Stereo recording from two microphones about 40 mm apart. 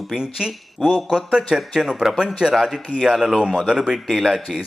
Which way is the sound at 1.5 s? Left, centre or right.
Centre.